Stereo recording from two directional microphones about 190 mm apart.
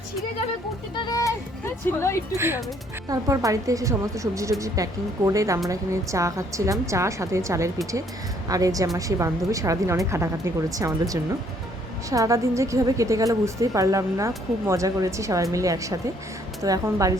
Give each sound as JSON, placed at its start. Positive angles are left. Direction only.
{"t": 0.9, "sound": "speech", "side_deg": 20}
{"t": 3.1, "sound": "a woman's voice", "side_deg": -15}